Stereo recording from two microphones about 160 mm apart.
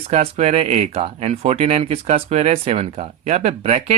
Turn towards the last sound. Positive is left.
turn(degrees=-45)  # may be behind; listen again after turning